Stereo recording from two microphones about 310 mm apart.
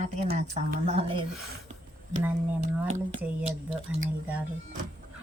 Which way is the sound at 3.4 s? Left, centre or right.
Right.